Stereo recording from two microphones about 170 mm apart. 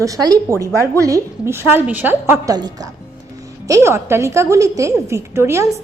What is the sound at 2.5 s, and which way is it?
A woman's voice, 25° right (ahead or behind).